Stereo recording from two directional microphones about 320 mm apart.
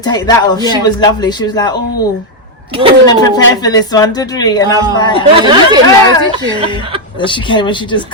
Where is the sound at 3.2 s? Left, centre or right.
Centre.